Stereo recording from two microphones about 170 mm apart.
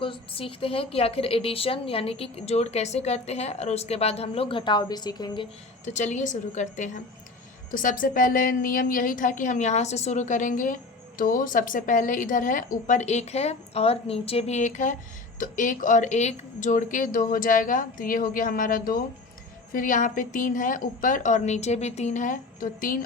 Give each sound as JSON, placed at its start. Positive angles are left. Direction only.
{"t": 0.0, "sound": "a woman's voice", "side_deg": 30}
{"t": 5.8, "sound": "speech", "side_deg": 45}